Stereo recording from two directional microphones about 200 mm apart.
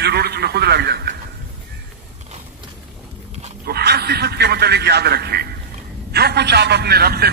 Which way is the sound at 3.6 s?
55° right (ahead or behind).